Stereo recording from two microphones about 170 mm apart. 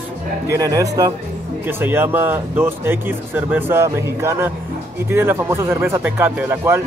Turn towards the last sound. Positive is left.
turn(degrees=-10)  # may be behind; listen again after turning